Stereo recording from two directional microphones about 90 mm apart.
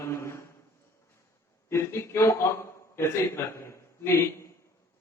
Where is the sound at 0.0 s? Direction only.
30° left (ahead or behind).